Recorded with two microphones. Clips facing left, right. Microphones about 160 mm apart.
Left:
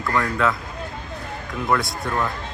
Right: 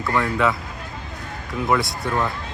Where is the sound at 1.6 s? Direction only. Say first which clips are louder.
Right 1 dB; centre (ahead or behind).